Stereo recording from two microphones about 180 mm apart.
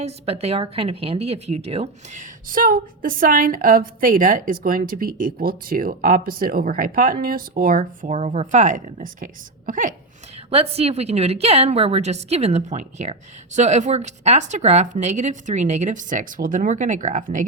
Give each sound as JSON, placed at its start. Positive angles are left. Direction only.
{"t": 0.0, "sound": "speech", "side_deg": -35}
{"t": 10.3, "sound": "speech", "side_deg": -35}